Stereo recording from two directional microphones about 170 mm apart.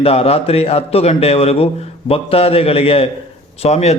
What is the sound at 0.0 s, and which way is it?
A man's voice, 35° left (ahead or behind).